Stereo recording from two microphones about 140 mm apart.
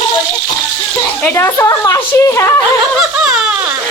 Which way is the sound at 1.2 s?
20° left (ahead or behind).